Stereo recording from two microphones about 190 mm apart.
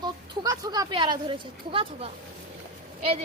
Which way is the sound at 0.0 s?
20° right (ahead or behind).